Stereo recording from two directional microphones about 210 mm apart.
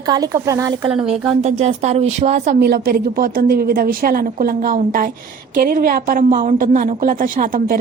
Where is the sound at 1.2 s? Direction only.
25° right (ahead or behind).